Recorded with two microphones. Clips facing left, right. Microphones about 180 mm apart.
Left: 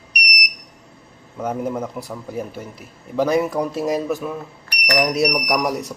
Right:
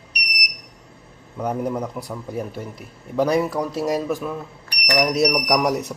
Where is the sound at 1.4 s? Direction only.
5° left (ahead or behind).